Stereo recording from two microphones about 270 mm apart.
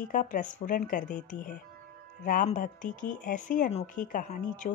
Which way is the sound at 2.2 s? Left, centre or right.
Left.